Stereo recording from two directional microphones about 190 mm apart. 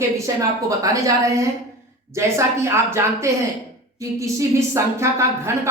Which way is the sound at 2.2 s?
15° right (ahead or behind).